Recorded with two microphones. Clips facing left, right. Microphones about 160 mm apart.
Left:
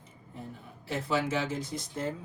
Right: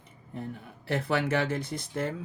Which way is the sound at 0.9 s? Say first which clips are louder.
Right 3 dB; 60° right (ahead or behind).